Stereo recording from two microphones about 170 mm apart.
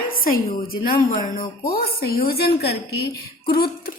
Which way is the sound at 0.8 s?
55° left (ahead or behind).